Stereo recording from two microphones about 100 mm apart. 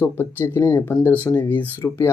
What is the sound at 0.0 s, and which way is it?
Speech, 20° left (ahead or behind).